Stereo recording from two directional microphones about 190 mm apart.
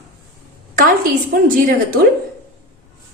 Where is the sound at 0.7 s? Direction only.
50° right (ahead or behind).